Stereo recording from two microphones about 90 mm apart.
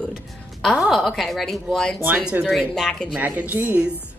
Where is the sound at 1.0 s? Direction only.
Centre (ahead or behind).